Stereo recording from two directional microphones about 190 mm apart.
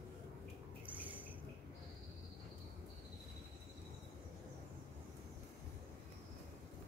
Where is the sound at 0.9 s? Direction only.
10° right (ahead or behind).